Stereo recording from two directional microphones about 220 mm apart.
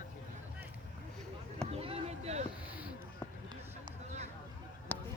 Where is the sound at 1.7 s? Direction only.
25° right (ahead or behind).